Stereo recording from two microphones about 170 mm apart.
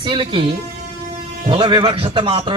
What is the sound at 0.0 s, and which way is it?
Speech, 30° right (ahead or behind).